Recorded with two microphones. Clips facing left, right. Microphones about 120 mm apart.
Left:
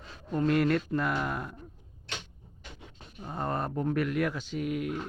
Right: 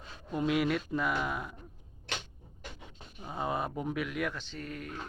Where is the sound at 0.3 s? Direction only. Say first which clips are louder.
Left 4 dB; 5° right (ahead or behind).